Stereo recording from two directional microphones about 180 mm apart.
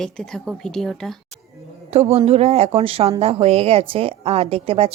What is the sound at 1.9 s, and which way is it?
Speech, 35° right (ahead or behind).